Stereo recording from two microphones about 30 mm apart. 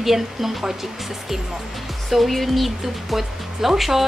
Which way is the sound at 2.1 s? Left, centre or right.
Centre.